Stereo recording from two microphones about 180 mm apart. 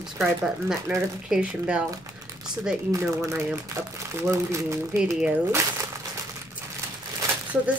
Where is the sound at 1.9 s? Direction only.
20° right (ahead or behind).